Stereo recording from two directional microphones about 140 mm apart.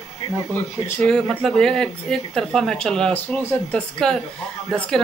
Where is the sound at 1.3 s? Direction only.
5° left (ahead or behind).